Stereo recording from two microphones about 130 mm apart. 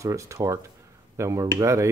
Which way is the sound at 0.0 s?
25° right (ahead or behind).